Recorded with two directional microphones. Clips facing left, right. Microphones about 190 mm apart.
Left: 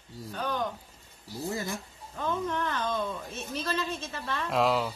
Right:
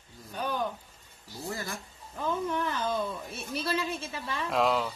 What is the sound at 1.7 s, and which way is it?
Speech, 5° right (ahead or behind).